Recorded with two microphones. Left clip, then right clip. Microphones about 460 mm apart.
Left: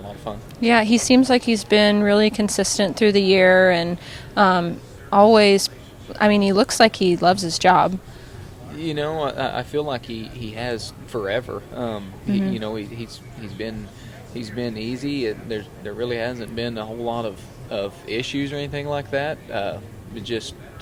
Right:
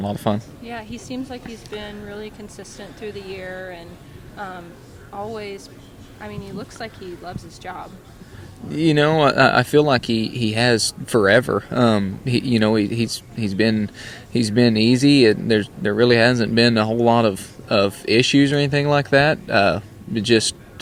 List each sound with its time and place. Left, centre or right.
0.0 s speech: right
0.6 s speech: left
8.7 s speech: right